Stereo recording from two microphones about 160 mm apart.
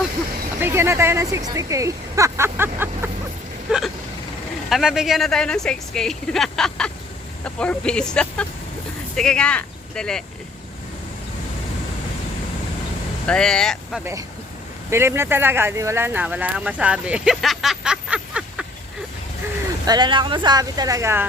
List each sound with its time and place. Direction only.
0.6 s speech: 15° right (ahead or behind)
3.7 s speech: centre (ahead or behind)
13.2 s speech: 5° left (ahead or behind)
14.0 s speech: 20° right (ahead or behind)
19.8 s speech: 25° right (ahead or behind)